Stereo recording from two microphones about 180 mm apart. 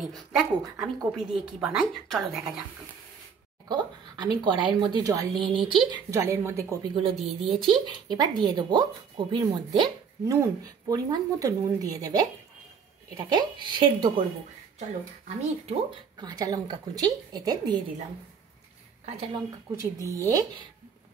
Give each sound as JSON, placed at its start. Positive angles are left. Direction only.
{"t": 0.0, "sound": "a woman's voice", "side_deg": 0}
{"t": 3.6, "sound": "a woman's voice", "side_deg": -25}
{"t": 6.9, "sound": "speech", "side_deg": -30}
{"t": 7.2, "sound": "a woman's voice", "side_deg": 0}
{"t": 7.4, "sound": "speech", "side_deg": -30}
{"t": 15.2, "sound": "speech", "side_deg": -35}
{"t": 16.2, "sound": "speech", "side_deg": -20}
{"t": 20.1, "sound": "a woman's voice", "side_deg": -20}